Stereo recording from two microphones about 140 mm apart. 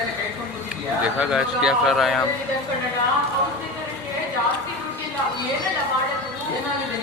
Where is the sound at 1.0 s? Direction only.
5° right (ahead or behind).